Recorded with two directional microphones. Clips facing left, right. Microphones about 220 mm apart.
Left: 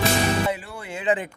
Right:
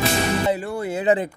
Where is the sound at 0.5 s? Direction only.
40° right (ahead or behind).